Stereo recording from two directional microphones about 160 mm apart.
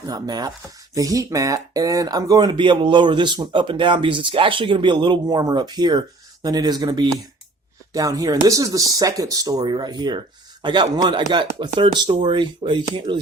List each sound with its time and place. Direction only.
0.1 s speech: 25° right (ahead or behind)